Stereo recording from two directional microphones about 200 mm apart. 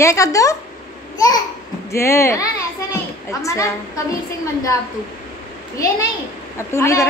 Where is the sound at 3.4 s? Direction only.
15° left (ahead or behind).